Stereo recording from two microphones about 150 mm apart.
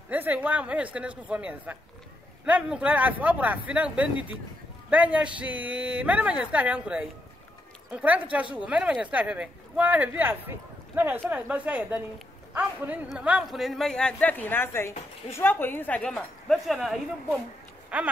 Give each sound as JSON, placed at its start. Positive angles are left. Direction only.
{"t": 0.1, "sound": "a man's voice", "side_deg": -10}